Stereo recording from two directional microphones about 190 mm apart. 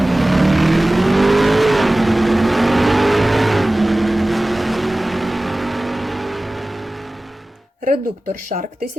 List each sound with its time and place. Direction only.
0.0 s vehicle: centre (ahead or behind)